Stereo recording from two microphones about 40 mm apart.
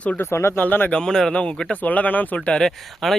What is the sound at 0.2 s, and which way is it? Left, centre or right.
Speech, left.